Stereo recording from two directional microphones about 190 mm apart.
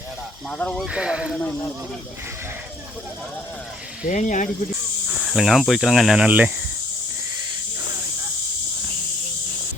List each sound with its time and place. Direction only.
0.5 s speech: 5° left (ahead or behind)
4.0 s speech: 40° left (ahead or behind)
5.0 s speech: centre (ahead or behind)